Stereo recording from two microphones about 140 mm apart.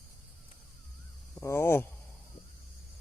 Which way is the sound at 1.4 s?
20° left (ahead or behind).